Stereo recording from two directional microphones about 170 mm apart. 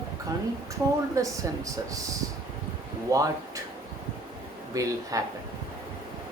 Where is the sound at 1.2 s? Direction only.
20° right (ahead or behind).